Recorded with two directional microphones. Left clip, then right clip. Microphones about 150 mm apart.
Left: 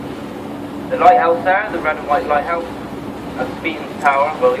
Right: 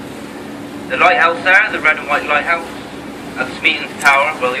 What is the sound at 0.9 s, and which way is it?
A man's voice, 20° left (ahead or behind).